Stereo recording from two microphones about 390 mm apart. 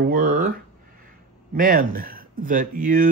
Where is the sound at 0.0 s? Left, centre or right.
Right.